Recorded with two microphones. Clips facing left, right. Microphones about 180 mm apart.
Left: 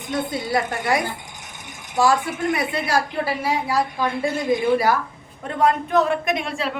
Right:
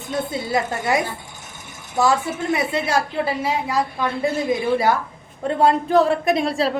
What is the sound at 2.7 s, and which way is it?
A woman's voice, 25° right (ahead or behind).